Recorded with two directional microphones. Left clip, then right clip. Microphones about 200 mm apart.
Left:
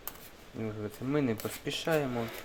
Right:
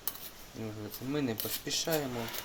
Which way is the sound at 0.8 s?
30° left (ahead or behind).